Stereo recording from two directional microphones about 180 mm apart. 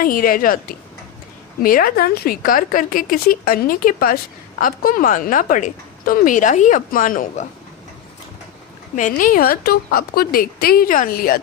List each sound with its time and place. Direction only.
0.0 s a woman's voice: 50° left (ahead or behind)
9.0 s a woman's voice: 45° left (ahead or behind)